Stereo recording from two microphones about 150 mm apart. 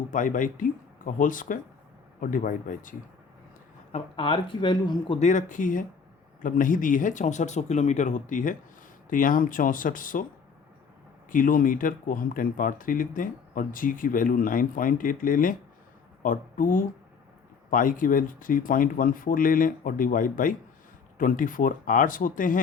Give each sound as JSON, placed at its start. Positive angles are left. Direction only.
{"t": 0.1, "sound": "speech", "side_deg": 60}
{"t": 3.9, "sound": "speech", "side_deg": 35}
{"t": 5.2, "sound": "speech", "side_deg": 55}
{"t": 11.3, "sound": "speech", "side_deg": 65}